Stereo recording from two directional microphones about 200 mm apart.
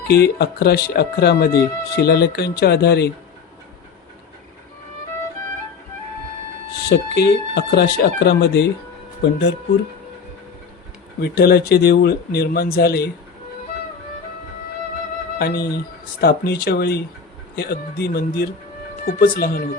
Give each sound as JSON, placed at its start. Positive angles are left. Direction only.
{"t": 0.1, "sound": "speech", "side_deg": 55}
{"t": 6.9, "sound": "speech", "side_deg": 60}
{"t": 11.2, "sound": "speech", "side_deg": 50}
{"t": 15.4, "sound": "speech", "side_deg": 50}